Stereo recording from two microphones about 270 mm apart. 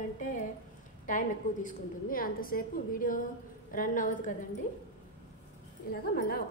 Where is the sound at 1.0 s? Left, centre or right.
Left.